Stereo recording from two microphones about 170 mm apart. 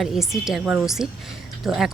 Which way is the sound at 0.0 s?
Centre (ahead or behind).